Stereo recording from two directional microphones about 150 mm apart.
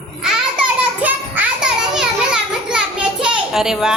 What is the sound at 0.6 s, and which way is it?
Children playing, 10° right (ahead or behind).